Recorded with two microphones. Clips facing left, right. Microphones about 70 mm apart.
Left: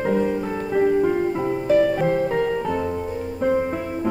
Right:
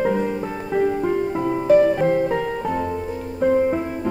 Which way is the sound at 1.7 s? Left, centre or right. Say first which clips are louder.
Right 3 dB; centre.